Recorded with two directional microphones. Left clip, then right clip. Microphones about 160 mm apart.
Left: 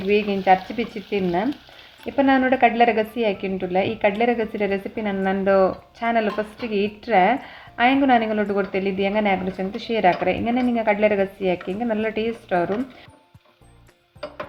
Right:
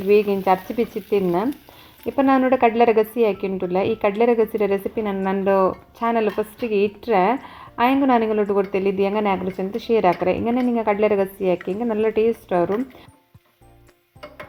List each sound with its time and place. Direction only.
0.1 s a woman's voice: 20° right (ahead or behind)